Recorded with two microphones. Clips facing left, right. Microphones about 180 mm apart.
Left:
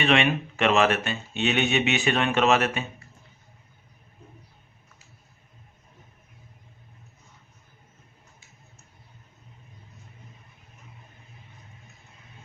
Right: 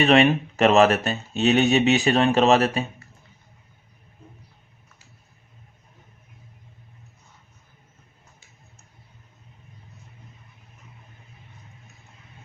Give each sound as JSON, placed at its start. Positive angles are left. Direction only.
{"t": 0.0, "sound": "speech", "side_deg": -40}